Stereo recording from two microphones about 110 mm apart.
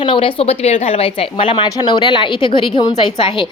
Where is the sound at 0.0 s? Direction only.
50° left (ahead or behind).